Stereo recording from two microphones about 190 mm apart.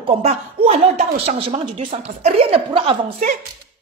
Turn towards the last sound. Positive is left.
turn(degrees=-30)  # may be behind; listen again after turning